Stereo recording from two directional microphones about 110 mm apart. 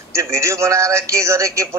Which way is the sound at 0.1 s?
25° right (ahead or behind).